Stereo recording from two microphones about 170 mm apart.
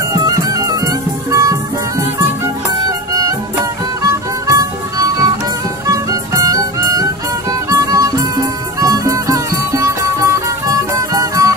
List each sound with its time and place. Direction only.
0.1 s music: 20° right (ahead or behind)
3.1 s music: 20° right (ahead or behind)